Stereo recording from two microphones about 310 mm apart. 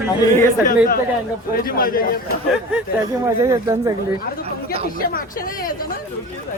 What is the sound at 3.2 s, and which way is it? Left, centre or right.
Speech, centre.